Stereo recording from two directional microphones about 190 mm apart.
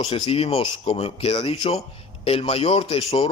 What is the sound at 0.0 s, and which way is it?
A man's voice, 30° left (ahead or behind).